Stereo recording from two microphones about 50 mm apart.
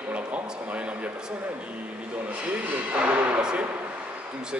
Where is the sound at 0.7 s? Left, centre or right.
Right.